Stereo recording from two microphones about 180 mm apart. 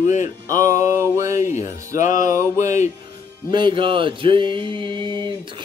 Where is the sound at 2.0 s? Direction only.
45° left (ahead or behind).